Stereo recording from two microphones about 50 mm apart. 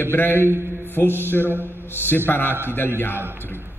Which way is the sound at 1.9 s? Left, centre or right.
Left.